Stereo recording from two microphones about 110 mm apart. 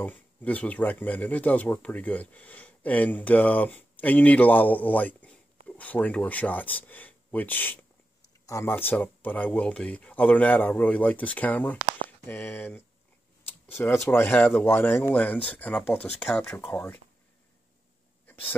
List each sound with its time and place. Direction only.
0.0 s speech: 15° left (ahead or behind)
13.5 s a sound: 20° left (ahead or behind)
14.0 s speech: 20° left (ahead or behind)
16.3 s speech: 5° left (ahead or behind)